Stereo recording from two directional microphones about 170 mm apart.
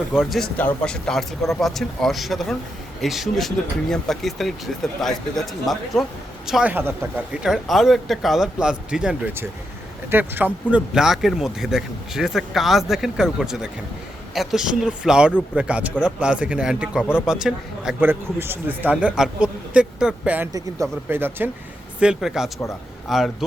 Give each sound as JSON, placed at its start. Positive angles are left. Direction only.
{"t": 0.1, "sound": "speech", "side_deg": 0}
{"t": 17.0, "sound": "speech", "side_deg": 15}
{"t": 17.2, "sound": "speech", "side_deg": -5}
{"t": 20.5, "sound": "a man's voice", "side_deg": -20}